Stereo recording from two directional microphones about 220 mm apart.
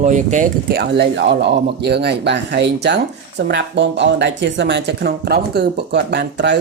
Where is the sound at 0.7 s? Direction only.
50° right (ahead or behind).